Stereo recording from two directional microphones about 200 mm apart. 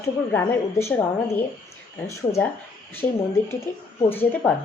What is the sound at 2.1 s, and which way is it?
Speech, 15° left (ahead or behind).